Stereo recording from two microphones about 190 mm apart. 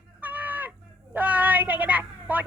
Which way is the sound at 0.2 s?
10° right (ahead or behind).